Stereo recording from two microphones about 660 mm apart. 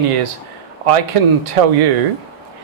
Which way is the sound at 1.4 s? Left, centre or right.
Right.